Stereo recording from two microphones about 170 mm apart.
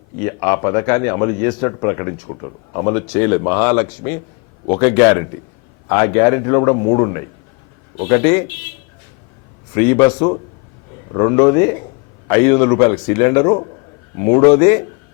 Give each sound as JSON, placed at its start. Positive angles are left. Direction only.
{"t": 0.2, "sound": "a man's voice", "side_deg": 20}
{"t": 9.7, "sound": "a man's voice", "side_deg": 15}